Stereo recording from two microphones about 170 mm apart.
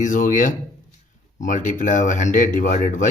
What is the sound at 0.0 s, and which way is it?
Speech, 50° left (ahead or behind).